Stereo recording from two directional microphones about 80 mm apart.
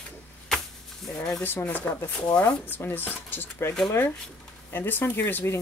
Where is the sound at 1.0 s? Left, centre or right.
Centre.